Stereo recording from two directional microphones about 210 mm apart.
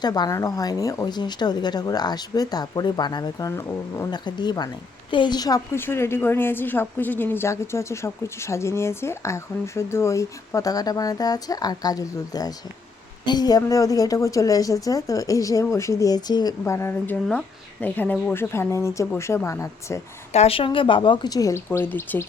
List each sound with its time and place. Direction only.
0.0 s a woman's voice: 20° left (ahead or behind)
20.3 s a woman's voice: 30° left (ahead or behind); by 22.3 s 10° left (ahead or behind)